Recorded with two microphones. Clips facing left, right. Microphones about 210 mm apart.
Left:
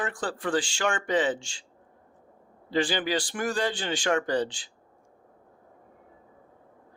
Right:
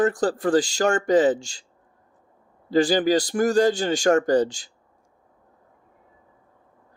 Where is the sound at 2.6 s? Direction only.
40° right (ahead or behind).